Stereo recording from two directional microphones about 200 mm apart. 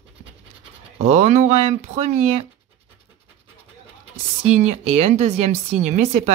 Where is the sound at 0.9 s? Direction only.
35° right (ahead or behind).